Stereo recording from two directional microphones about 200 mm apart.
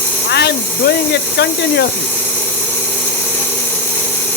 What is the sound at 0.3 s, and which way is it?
Hiss, 55° left (ahead or behind).